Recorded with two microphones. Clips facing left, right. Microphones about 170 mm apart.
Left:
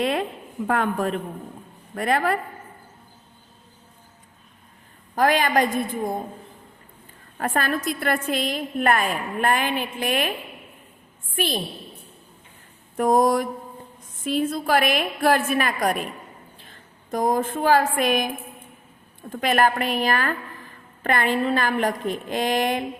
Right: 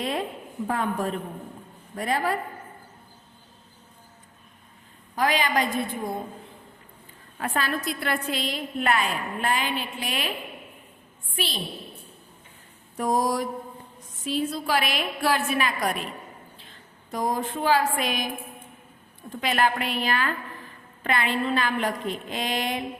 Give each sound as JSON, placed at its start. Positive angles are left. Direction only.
{"t": 0.0, "sound": "a sound", "side_deg": 70}
{"t": 0.7, "sound": "a woman's voice", "side_deg": 70}
{"t": 5.1, "sound": "a woman's voice", "side_deg": 50}
{"t": 7.3, "sound": "a woman's voice", "side_deg": 45}
{"t": 11.3, "sound": "a woman's voice", "side_deg": 50}
{"t": 13.0, "sound": "a woman's voice", "side_deg": 55}
{"t": 19.3, "sound": "a woman's voice", "side_deg": 50}